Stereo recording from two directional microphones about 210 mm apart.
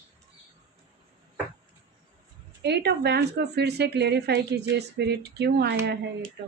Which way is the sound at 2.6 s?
50° right (ahead or behind).